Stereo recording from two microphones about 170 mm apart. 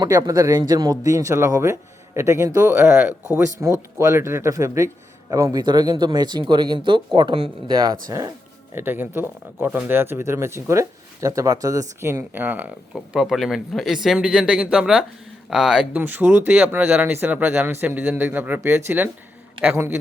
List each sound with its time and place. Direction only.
0.0 s speech: 20° right (ahead or behind)
8.7 s speech: 10° right (ahead or behind)